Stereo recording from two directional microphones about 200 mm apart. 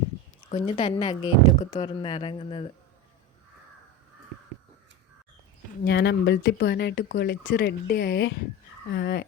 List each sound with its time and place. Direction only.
0.5 s speech: 30° left (ahead or behind)
5.8 s speech: 60° left (ahead or behind)